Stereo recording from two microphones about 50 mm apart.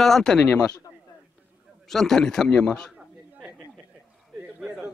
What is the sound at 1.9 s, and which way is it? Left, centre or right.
A man's voice, centre.